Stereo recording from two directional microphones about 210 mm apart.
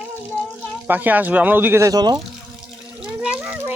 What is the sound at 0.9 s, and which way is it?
Speech, 10° right (ahead or behind).